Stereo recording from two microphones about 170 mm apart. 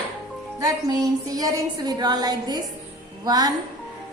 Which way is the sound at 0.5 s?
20° right (ahead or behind).